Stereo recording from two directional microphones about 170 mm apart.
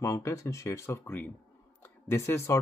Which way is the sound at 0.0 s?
20° left (ahead or behind).